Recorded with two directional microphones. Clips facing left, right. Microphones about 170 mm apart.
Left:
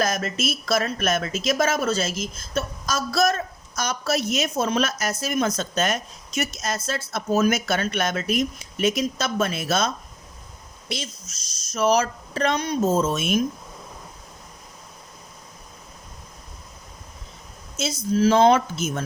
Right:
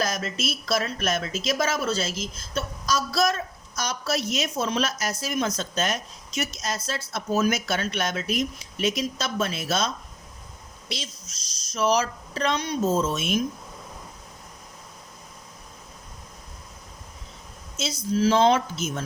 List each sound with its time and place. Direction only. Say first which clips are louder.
0.0 s speech: left 3 dB; 50° left (ahead or behind)
17.8 s speech: left 3 dB; 50° left (ahead or behind)